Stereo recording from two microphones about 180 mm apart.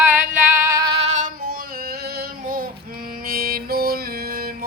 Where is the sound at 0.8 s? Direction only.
25° right (ahead or behind).